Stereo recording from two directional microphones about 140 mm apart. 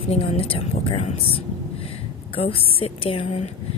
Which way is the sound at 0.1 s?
45° left (ahead or behind).